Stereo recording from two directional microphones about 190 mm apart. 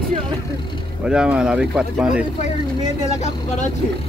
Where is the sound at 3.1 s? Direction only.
40° left (ahead or behind).